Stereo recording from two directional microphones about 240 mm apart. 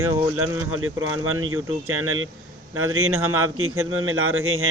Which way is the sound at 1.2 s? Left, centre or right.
Right.